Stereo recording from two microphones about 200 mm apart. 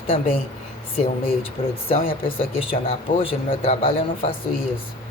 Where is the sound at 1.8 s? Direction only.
25° left (ahead or behind).